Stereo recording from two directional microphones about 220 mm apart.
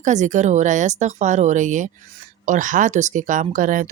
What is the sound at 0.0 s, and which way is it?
Speech, 35° right (ahead or behind).